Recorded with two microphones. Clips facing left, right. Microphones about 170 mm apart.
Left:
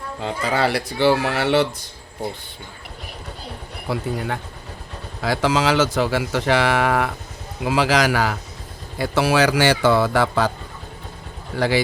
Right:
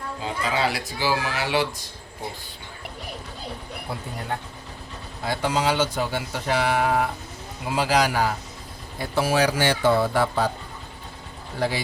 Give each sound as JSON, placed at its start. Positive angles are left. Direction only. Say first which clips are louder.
{"t": 0.2, "sound": "speech", "louder": "left 4 dB", "side_deg": 65}
{"t": 3.9, "sound": "speech", "louder": "left 9 dB", "side_deg": 90}
{"t": 5.2, "sound": "speech", "louder": "left 4 dB", "side_deg": 90}
{"t": 11.5, "sound": "speech", "louder": "left 6 dB", "side_deg": 90}